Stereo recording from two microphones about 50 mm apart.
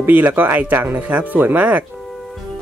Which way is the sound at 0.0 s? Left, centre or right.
Right.